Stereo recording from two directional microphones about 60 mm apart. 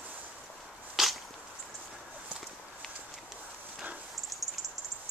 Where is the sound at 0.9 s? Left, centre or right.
Centre.